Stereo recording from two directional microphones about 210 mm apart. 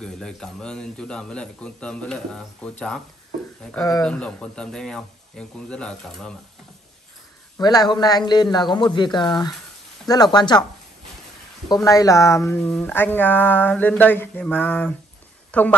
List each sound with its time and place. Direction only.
0.0 s speech: 5° left (ahead or behind)
3.7 s speech: 15° left (ahead or behind)
4.0 s speech: 5° left (ahead or behind)
7.5 s a man's voice: 20° left (ahead or behind)
11.7 s a woman's voice: 15° left (ahead or behind)